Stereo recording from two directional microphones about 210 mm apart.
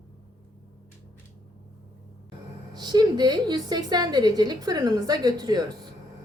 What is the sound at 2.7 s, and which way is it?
Speech, 20° right (ahead or behind).